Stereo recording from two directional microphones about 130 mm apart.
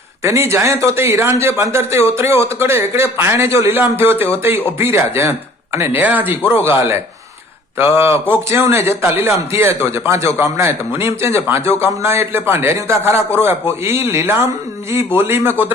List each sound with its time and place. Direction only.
0.2 s a man's voice: 20° right (ahead or behind)